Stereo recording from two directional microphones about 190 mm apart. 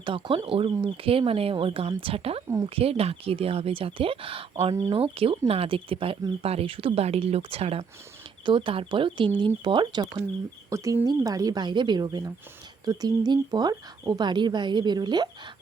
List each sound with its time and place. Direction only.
0.0 s speech: 25° right (ahead or behind)